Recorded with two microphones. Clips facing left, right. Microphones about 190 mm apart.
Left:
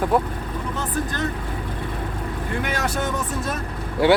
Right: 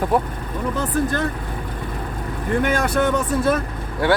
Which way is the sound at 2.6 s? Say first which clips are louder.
Right 6 dB; 55° right (ahead or behind).